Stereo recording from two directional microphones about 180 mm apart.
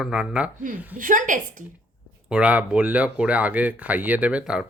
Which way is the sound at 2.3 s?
5° right (ahead or behind).